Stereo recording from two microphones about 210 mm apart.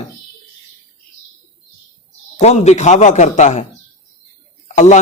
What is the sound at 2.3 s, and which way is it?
A man's voice, 30° left (ahead or behind).